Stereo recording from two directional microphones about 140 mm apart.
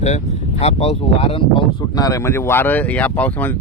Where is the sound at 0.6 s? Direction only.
45° left (ahead or behind).